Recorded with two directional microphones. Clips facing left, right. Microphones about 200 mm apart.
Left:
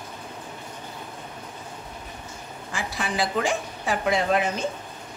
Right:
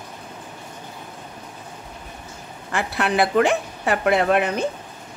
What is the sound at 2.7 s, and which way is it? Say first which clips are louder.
A woman's voice: right 7 dB; 65° right (ahead or behind).